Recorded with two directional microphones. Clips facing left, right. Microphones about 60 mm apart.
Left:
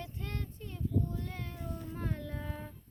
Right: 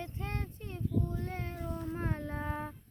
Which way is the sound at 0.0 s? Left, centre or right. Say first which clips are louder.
Right 2 dB; right.